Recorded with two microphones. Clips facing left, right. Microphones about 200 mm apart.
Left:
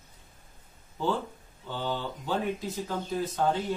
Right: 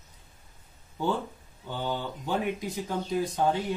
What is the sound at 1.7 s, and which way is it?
Speech, 15° right (ahead or behind).